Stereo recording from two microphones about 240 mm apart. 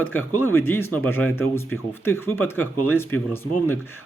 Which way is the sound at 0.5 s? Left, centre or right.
Centre.